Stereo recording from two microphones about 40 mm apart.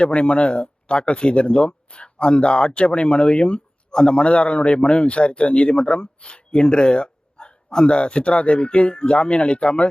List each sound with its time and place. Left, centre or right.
0.0 s a man's voice: left